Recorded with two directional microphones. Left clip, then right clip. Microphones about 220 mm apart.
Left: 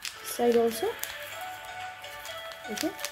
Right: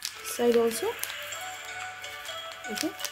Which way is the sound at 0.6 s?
5° right (ahead or behind).